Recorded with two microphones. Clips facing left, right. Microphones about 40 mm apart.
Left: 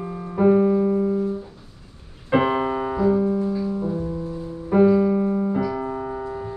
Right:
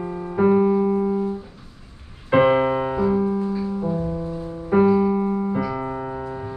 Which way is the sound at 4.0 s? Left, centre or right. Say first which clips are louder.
Right 1 dB; right.